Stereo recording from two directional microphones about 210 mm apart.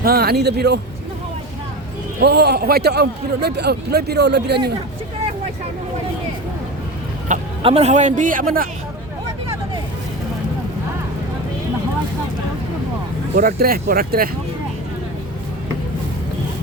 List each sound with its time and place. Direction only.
0.0 s a man's voice: 45° right (ahead or behind)
2.2 s a man's voice: 50° right (ahead or behind)
7.3 s speech: 30° right (ahead or behind)
13.3 s a man's voice: 45° right (ahead or behind)